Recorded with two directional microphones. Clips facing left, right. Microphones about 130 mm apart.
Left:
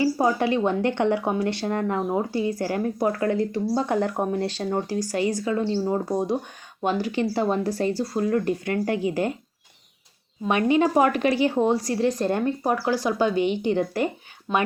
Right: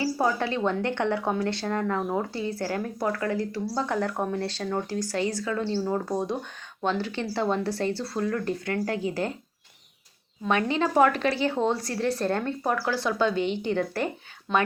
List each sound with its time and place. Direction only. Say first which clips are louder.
0.0 s speech: left 4 dB; 15° left (ahead or behind)
3.1 s speech: left 4 dB; 25° left (ahead or behind)
10.4 s speech: left 5 dB; 15° left (ahead or behind)
14.5 s speech: left 1 dB; 5° left (ahead or behind)